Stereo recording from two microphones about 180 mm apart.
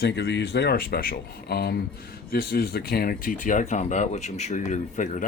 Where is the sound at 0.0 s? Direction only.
70° left (ahead or behind).